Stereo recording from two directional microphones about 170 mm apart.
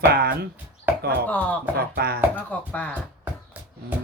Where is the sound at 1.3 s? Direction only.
10° left (ahead or behind).